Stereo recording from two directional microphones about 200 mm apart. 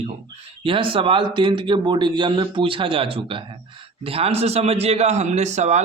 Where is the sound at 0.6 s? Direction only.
25° right (ahead or behind).